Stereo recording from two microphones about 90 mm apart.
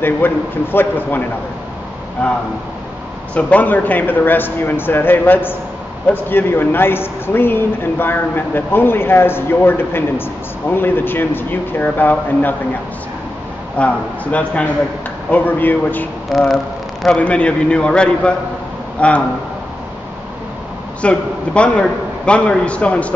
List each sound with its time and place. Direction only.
0.0 s speech: 25° left (ahead or behind)
3.3 s speech: 15° left (ahead or behind)
13.7 s a man's voice: 15° left (ahead or behind)
16.3 s speech: centre (ahead or behind)
17.2 s a man's voice: 15° left (ahead or behind)
21.0 s a man's voice: 10° left (ahead or behind)